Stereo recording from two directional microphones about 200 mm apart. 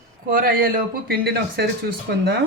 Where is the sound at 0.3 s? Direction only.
50° right (ahead or behind).